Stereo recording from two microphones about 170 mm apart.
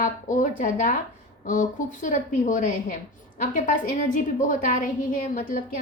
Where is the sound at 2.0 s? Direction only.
50° left (ahead or behind).